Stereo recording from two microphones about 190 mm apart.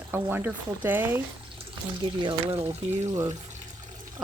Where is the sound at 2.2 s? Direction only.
30° right (ahead or behind).